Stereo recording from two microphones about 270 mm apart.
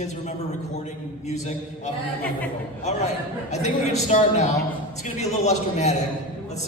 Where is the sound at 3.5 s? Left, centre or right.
Left.